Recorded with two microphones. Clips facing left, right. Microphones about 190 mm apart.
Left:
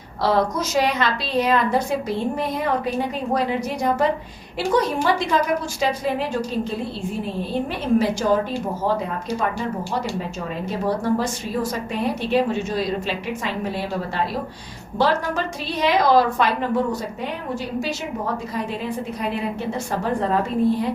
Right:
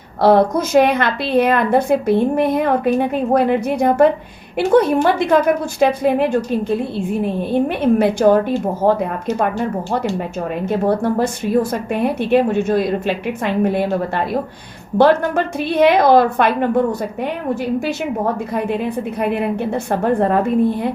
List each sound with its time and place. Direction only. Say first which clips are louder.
0.2 s a woman's voice: right 8 dB; 55° right (ahead or behind)